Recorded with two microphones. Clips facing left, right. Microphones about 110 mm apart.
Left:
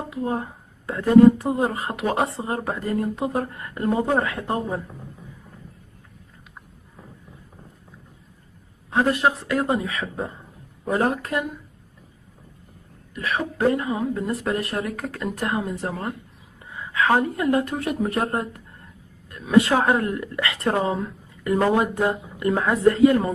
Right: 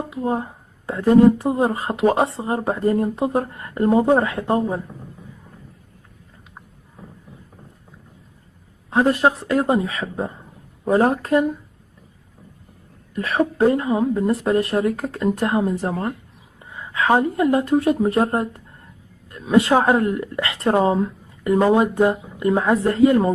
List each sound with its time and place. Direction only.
0.1 s a woman's voice: 25° right (ahead or behind)
8.9 s a woman's voice: 30° right (ahead or behind)
13.1 s a woman's voice: 35° right (ahead or behind)
21.5 s a woman's voice: 20° right (ahead or behind)